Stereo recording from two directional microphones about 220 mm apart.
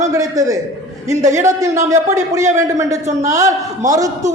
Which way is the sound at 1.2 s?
35° right (ahead or behind).